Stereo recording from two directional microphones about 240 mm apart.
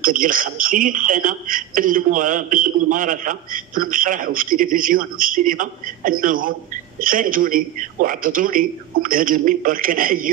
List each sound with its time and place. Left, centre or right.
0.0 s a woman's voice: right